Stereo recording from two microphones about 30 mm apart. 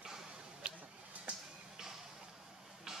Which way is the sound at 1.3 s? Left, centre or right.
Right.